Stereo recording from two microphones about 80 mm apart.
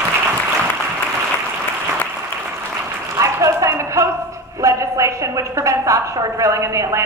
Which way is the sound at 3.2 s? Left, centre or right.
Right.